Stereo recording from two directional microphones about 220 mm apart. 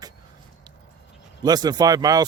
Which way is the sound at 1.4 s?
20° right (ahead or behind).